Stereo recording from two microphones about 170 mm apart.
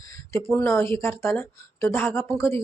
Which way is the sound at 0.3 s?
15° left (ahead or behind).